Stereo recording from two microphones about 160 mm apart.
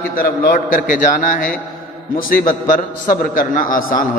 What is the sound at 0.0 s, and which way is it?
Speech, 65° left (ahead or behind).